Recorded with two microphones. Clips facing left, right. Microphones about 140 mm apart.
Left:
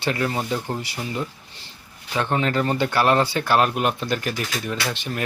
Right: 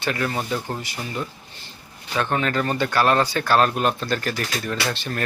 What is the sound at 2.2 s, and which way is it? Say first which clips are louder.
Speech: left 1 dB; 20° left (ahead or behind).